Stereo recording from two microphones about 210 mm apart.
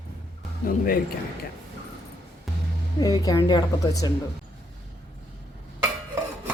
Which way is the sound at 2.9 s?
20° left (ahead or behind).